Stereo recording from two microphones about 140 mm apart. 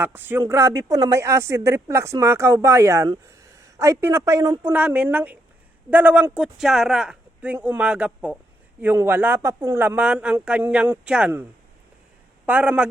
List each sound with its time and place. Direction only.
0.0 s speech: 15° right (ahead or behind)
4.6 s speech: 10° right (ahead or behind)
12.5 s speech: 10° right (ahead or behind)